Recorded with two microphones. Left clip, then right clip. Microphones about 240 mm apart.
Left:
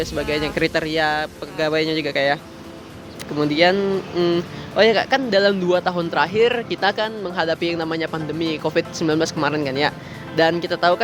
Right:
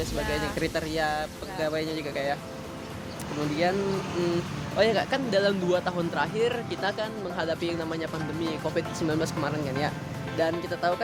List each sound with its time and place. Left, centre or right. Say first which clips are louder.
0.0 s a man's voice: left 7 dB; left
3.5 s a man's voice: left 10 dB; left
4.8 s a man's voice: left 8 dB; left